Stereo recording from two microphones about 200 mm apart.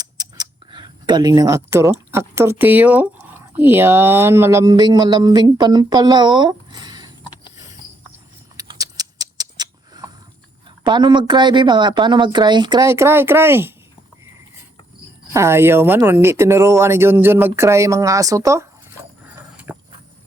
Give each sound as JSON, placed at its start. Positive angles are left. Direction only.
{"t": 0.0, "sound": "scissors", "side_deg": -20}
{"t": 3.6, "sound": "speech", "side_deg": -10}
{"t": 8.5, "sound": "rodents", "side_deg": -20}
{"t": 10.8, "sound": "speech", "side_deg": -25}
{"t": 15.3, "sound": "speech", "side_deg": -15}
{"t": 19.7, "sound": "a sound", "side_deg": -10}